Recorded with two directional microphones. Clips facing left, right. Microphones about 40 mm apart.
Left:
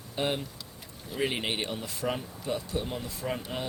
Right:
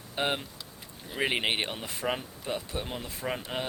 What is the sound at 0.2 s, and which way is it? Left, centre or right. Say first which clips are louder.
Speech: even; right.